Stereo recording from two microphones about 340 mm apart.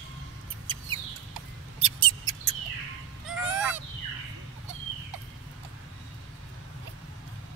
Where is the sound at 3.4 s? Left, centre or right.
Centre.